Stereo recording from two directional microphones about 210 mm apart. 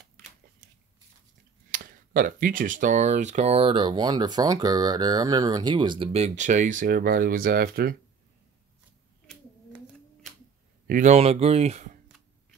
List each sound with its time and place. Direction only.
1.7 s speech: 40° right (ahead or behind)
10.9 s speech: 35° right (ahead or behind)